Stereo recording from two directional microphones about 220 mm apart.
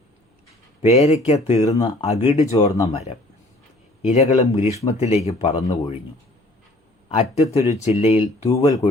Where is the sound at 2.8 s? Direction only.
30° left (ahead or behind).